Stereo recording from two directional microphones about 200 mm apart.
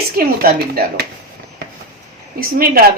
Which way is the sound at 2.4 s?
45° right (ahead or behind).